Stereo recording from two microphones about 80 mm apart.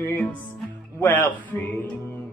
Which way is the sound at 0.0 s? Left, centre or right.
Left.